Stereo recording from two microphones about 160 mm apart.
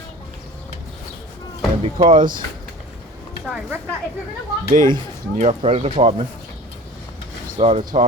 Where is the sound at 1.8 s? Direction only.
35° right (ahead or behind).